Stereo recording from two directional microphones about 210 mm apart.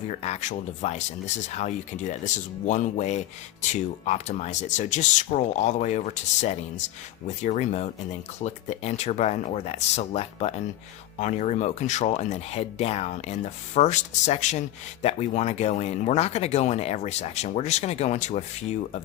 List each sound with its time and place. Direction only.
0.1 s speech: 35° left (ahead or behind)